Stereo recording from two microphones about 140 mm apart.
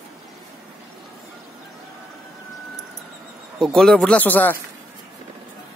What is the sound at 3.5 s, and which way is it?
Speech, centre (ahead or behind).